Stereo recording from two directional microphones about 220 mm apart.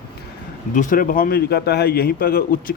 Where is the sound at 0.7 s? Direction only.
35° left (ahead or behind).